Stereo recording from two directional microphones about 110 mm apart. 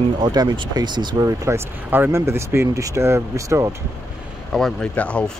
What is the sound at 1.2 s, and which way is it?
Speech, 30° right (ahead or behind).